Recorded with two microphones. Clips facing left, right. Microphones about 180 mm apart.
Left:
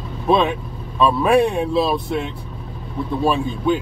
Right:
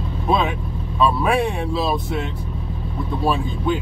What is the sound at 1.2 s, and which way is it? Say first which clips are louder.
Speech: left 5 dB; centre (ahead or behind).